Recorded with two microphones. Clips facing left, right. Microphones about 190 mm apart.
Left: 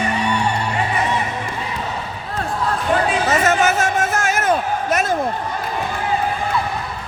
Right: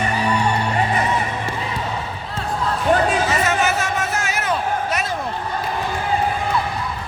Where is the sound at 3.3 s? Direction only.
50° left (ahead or behind).